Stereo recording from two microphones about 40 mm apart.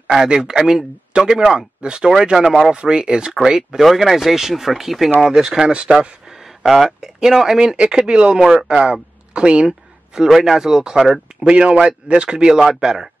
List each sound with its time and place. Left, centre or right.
0.0 s a man's voice: centre
3.8 s speech: centre
5.7 s a man's voice: right
6.6 s a man's voice: centre; by 9.7 s right
9.7 s a sound: centre
10.3 s speech: centre
11.4 s a man's voice: right